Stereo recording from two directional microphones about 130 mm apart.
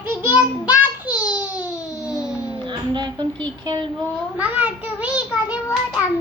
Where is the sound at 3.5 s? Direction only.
35° right (ahead or behind).